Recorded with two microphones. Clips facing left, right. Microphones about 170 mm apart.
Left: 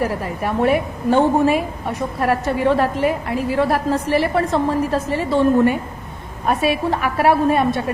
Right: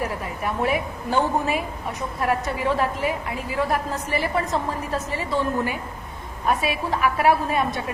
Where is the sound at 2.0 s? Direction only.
65° left (ahead or behind).